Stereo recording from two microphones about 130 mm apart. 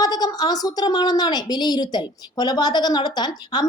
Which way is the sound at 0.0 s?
30° left (ahead or behind).